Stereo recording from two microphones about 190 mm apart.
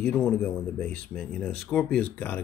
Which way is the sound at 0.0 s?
5° left (ahead or behind).